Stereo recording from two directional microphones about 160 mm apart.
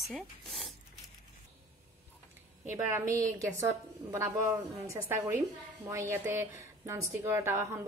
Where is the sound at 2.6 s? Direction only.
15° right (ahead or behind).